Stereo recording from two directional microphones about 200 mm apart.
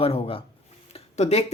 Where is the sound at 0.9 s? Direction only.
30° left (ahead or behind).